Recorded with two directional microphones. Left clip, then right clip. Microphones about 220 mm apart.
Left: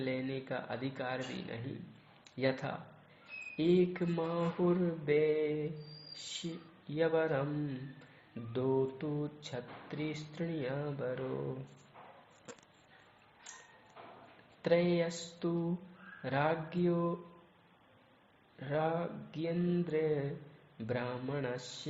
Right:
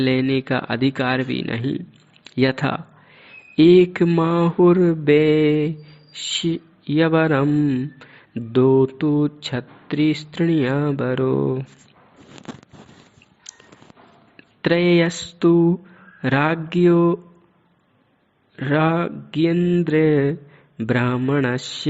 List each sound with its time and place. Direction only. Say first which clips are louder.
0.0 s mantra: right 18 dB; 45° right (ahead or behind)
14.6 s a sound: right 14 dB; 40° right (ahead or behind)
16.2 s mantra: right 13 dB; 40° right (ahead or behind)
18.5 s mantra: right 15 dB; 45° right (ahead or behind)